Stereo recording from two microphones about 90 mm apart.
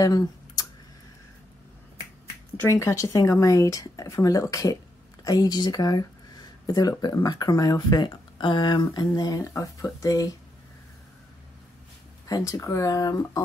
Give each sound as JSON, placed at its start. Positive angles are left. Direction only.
{"t": 0.0, "sound": "computer keyboard", "side_deg": 45}
{"t": 2.7, "sound": "speech", "side_deg": 35}
{"t": 12.3, "sound": "speech", "side_deg": 45}